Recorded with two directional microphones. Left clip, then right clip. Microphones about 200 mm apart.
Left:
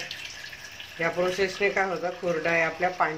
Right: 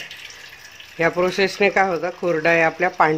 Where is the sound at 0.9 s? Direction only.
50° right (ahead or behind).